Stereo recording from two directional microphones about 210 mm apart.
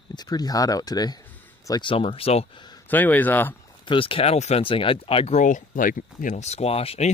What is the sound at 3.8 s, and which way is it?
Speech, 25° left (ahead or behind).